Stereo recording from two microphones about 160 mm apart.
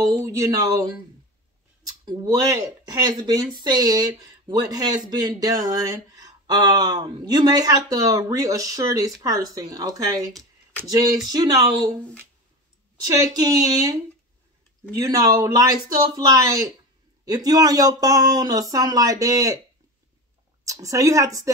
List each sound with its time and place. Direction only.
0.0 s speech: 20° right (ahead or behind)
2.0 s speech: 20° right (ahead or behind)
12.9 s speech: 25° right (ahead or behind)
15.0 s speech: 25° right (ahead or behind)
20.6 s speech: 20° right (ahead or behind)